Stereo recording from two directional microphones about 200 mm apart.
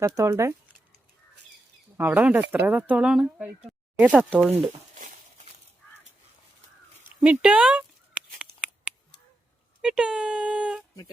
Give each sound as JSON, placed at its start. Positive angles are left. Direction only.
{"t": 0.0, "sound": "speech", "side_deg": -15}
{"t": 2.0, "sound": "speech", "side_deg": -10}
{"t": 4.5, "sound": "a sound", "side_deg": -35}
{"t": 7.2, "sound": "speech", "side_deg": -5}
{"t": 8.4, "sound": "a sound", "side_deg": -5}
{"t": 9.8, "sound": "speech", "side_deg": -5}